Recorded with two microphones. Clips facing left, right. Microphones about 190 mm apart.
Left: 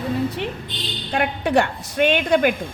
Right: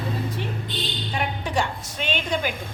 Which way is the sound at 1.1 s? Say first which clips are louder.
Left 8 dB; 65° left (ahead or behind).